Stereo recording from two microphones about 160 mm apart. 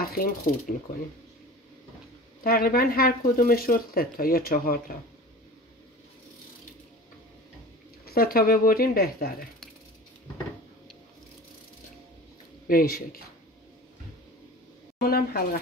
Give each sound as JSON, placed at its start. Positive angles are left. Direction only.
{"t": 0.0, "sound": "speech", "side_deg": 70}
{"t": 2.4, "sound": "speech", "side_deg": 65}
{"t": 8.0, "sound": "speech", "side_deg": 70}
{"t": 12.6, "sound": "speech", "side_deg": 65}
{"t": 15.0, "sound": "speech", "side_deg": 70}